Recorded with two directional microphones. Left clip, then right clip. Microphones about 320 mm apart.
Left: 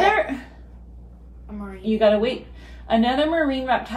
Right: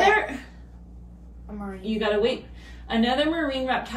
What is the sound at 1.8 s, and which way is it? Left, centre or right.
A woman's voice, centre.